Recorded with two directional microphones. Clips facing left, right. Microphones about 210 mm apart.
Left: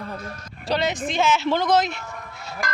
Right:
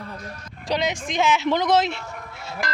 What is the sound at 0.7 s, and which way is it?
Speech, 15° right (ahead or behind).